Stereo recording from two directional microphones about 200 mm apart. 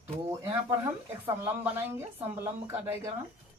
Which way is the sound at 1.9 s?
10° right (ahead or behind).